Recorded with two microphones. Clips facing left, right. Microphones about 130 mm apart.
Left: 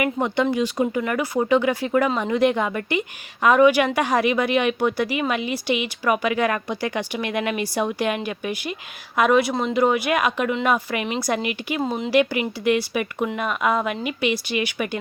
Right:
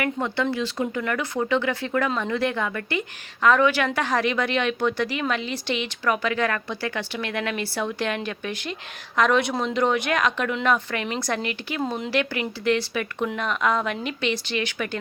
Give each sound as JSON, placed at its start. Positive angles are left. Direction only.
{"t": 0.0, "sound": "a woman's voice", "side_deg": 15}